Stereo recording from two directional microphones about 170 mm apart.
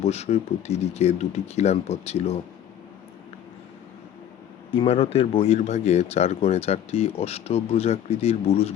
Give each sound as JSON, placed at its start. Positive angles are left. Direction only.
{"t": 0.0, "sound": "speech", "side_deg": 40}
{"t": 4.7, "sound": "speech", "side_deg": 35}